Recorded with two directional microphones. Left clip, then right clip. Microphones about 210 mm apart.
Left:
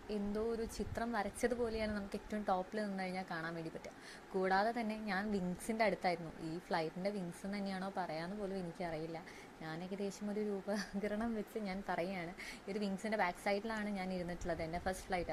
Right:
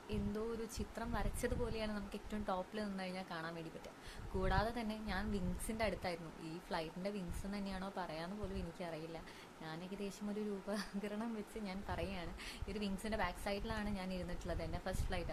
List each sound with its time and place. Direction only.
0.1 s a woman's voice: 15° left (ahead or behind)